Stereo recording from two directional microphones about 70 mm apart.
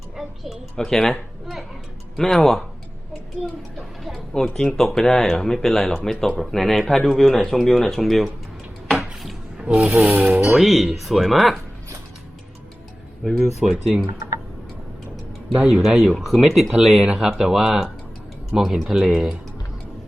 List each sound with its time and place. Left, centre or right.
0.2 s a child's voice: centre
2.1 s speech: centre
9.0 s a sound: centre
10.4 s speech: centre
13.2 s speech: centre
15.7 s speech: centre